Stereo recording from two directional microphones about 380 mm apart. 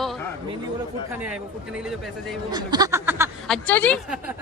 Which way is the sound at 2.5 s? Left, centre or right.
Centre.